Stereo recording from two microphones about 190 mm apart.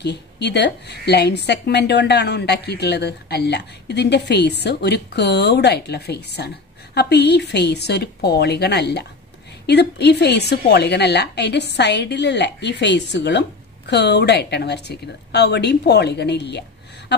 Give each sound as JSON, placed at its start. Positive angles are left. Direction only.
{"t": 0.0, "sound": "a woman's voice", "side_deg": 65}